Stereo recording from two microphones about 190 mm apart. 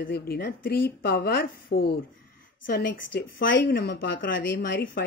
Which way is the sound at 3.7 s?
65° left (ahead or behind).